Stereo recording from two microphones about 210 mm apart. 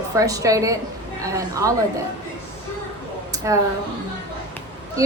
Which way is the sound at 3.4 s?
15° right (ahead or behind).